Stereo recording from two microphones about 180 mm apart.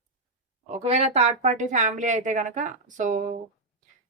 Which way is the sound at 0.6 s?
40° right (ahead or behind).